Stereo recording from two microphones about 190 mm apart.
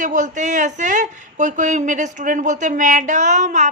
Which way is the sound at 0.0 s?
40° right (ahead or behind).